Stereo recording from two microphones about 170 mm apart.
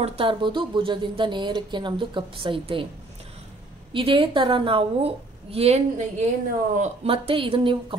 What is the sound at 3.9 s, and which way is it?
A woman's voice, 30° right (ahead or behind).